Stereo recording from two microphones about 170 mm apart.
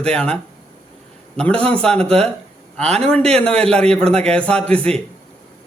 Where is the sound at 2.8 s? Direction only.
40° right (ahead or behind).